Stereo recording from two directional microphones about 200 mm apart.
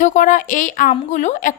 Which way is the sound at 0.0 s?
40° left (ahead or behind).